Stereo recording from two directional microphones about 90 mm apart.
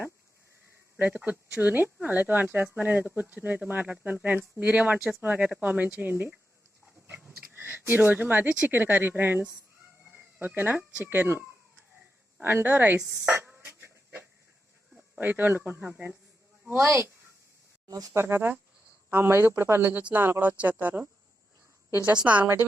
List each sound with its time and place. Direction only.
0.9 s speech: 20° right (ahead or behind)
13.5 s a sound: 25° right (ahead or behind)
15.2 s speech: 20° right (ahead or behind)
17.8 s speech: 45° right (ahead or behind)
18.2 s speech: 25° right (ahead or behind)
19.8 s speech: 15° right (ahead or behind)
22.2 s speech: 15° right (ahead or behind)